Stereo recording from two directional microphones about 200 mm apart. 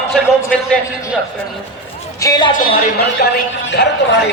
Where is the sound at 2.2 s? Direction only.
20° left (ahead or behind).